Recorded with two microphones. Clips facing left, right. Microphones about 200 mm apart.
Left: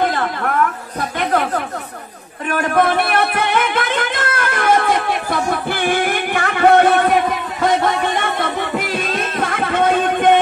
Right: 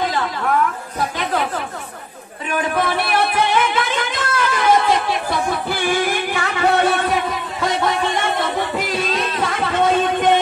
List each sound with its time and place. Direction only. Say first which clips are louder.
0.0 s a sound: left 2 dB; 55° left (ahead or behind)
2.5 s music: left 4 dB; 55° left (ahead or behind)
8.4 s music: left 1 dB; 50° left (ahead or behind)